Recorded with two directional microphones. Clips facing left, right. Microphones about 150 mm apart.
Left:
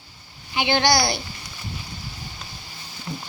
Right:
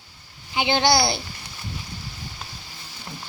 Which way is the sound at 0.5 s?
20° right (ahead or behind).